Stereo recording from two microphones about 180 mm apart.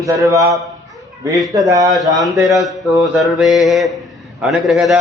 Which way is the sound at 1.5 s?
20° right (ahead or behind).